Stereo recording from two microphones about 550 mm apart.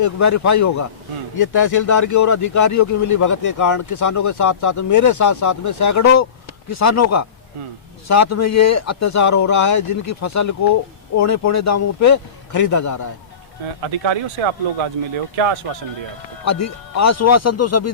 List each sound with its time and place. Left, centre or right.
0.0 s speech: left
13.8 s speech: right
16.4 s speech: left